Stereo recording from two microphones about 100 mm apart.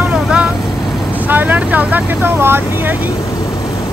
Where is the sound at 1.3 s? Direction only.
20° right (ahead or behind).